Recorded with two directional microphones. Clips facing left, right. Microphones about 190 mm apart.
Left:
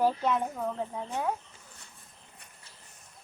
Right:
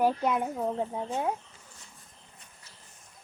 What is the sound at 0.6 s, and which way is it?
Speech, 25° right (ahead or behind).